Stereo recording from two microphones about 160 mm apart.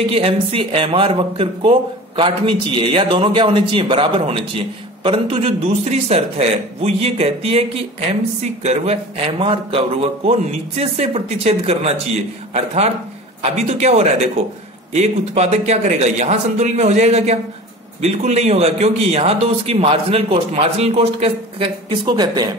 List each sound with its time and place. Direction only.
0.1 s speech: 35° right (ahead or behind)
13.4 s a man's voice: 45° right (ahead or behind); by 22.5 s 25° right (ahead or behind)